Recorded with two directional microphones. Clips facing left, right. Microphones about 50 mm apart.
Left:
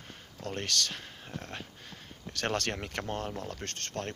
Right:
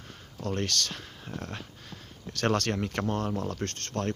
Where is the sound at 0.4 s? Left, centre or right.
Centre.